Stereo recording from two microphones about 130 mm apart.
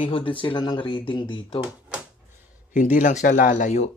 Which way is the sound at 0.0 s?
45° left (ahead or behind).